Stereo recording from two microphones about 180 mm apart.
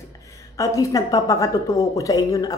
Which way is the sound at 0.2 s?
15° left (ahead or behind).